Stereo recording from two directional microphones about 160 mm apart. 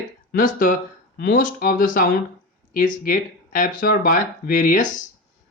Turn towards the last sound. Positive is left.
turn(degrees=55)  # may be behind; listen again after turning